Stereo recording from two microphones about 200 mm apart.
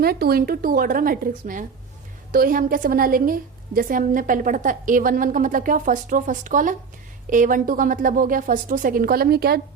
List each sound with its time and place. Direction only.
0.0 s a woman's voice: 50° right (ahead or behind)